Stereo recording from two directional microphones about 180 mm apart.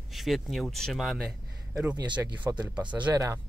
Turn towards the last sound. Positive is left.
turn(degrees=-15)  # may be behind; listen again after turning